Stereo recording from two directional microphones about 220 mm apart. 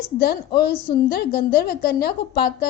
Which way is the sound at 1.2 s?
45° left (ahead or behind).